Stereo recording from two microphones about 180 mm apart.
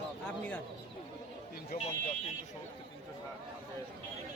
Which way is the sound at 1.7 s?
55° left (ahead or behind).